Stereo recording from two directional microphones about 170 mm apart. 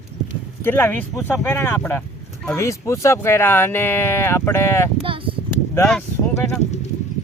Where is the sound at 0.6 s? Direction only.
15° left (ahead or behind).